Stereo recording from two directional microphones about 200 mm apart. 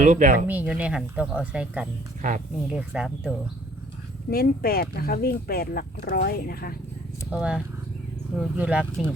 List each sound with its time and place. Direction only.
0.0 s speech: 40° right (ahead or behind)
0.4 s speech: 5° right (ahead or behind)
4.3 s speech: 50° left (ahead or behind)
7.3 s speech: 5° right (ahead or behind)